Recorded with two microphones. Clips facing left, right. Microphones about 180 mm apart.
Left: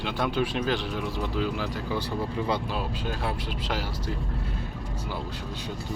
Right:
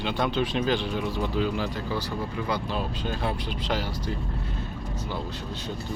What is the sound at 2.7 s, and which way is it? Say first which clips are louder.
Speech: right 1 dB; 5° left (ahead or behind).